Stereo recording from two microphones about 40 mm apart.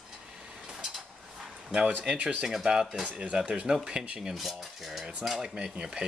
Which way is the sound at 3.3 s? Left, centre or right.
Right.